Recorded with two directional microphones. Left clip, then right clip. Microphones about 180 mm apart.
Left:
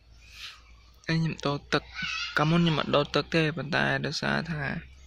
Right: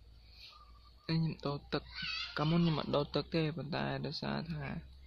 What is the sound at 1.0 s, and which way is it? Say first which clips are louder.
Speech: left 9 dB; 5° right (ahead or behind).